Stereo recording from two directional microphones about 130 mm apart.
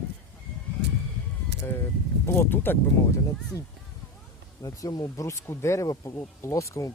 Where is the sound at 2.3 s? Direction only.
15° left (ahead or behind).